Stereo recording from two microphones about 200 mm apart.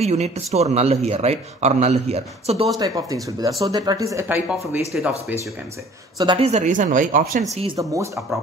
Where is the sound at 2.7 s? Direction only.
15° right (ahead or behind).